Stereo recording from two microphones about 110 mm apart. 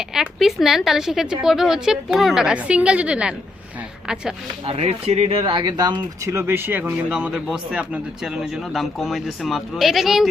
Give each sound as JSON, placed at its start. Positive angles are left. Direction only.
{"t": 0.1, "sound": "a woman's voice", "side_deg": -5}
{"t": 4.6, "sound": "speech", "side_deg": -60}
{"t": 5.4, "sound": "speech", "side_deg": -45}
{"t": 6.2, "sound": "a woman's voice", "side_deg": -25}